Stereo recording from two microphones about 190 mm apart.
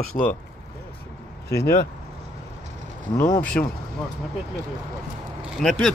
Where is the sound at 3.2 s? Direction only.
10° left (ahead or behind).